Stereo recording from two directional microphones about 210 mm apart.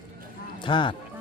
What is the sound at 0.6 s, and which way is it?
Speech, 25° left (ahead or behind).